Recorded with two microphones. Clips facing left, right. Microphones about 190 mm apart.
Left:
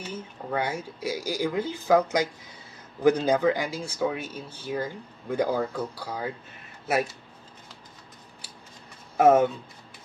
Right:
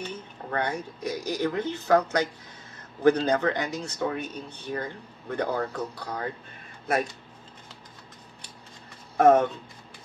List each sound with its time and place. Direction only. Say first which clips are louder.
0.0 s speech: even; 5° left (ahead or behind)
9.1 s speech: even; 5° left (ahead or behind)